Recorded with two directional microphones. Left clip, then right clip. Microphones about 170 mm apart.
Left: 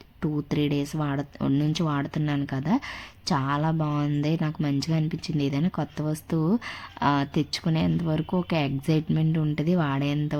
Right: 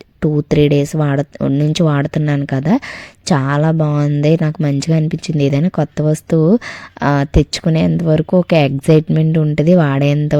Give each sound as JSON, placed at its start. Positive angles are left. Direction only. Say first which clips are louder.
{"t": 0.2, "sound": "speech", "louder": "right 14 dB", "side_deg": -45}